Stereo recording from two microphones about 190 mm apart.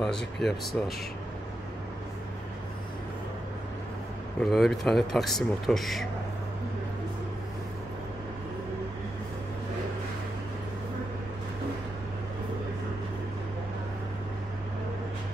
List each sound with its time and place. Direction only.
0.0 s speech: centre (ahead or behind)
4.4 s speech: centre (ahead or behind)